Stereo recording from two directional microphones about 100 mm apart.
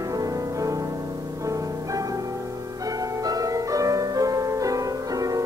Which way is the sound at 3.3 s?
35° right (ahead or behind).